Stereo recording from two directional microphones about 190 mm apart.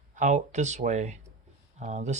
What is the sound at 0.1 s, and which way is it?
Speech, 40° right (ahead or behind).